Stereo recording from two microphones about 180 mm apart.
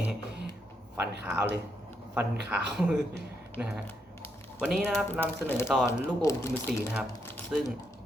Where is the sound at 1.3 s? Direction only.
10° right (ahead or behind).